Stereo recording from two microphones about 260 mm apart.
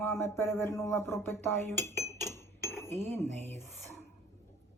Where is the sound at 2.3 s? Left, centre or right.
Centre.